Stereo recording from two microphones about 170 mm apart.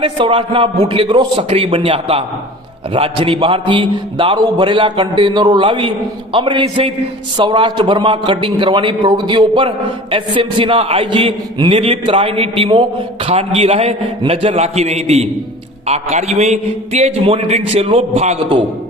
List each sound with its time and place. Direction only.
0.0 s a man's voice: 30° right (ahead or behind)